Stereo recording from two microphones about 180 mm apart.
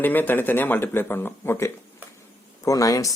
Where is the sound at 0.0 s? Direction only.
10° left (ahead or behind).